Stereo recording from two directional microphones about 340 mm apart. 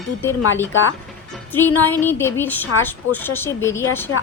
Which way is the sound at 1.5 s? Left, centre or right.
Centre.